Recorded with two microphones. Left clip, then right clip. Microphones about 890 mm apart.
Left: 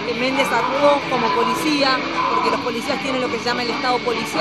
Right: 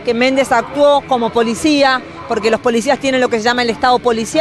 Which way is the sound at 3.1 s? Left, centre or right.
Right.